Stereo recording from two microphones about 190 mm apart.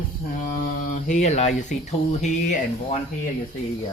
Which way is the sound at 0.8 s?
40° left (ahead or behind).